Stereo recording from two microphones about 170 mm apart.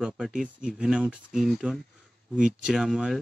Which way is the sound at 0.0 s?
5° right (ahead or behind).